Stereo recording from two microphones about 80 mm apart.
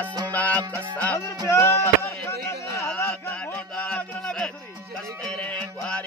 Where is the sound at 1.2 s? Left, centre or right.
Left.